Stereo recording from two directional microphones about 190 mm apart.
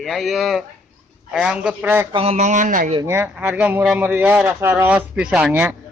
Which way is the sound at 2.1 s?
30° right (ahead or behind).